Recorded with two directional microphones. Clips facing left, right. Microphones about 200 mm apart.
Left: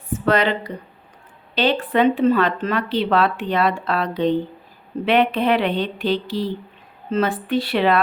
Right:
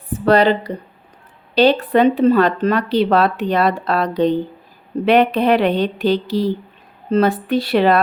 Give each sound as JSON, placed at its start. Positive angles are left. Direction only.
{"t": 0.1, "sound": "speech", "side_deg": -35}